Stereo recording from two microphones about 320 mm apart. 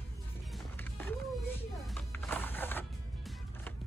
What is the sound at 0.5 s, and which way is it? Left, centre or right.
Music, centre.